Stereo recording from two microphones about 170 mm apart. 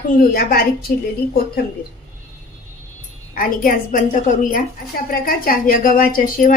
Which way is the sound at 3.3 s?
55° left (ahead or behind).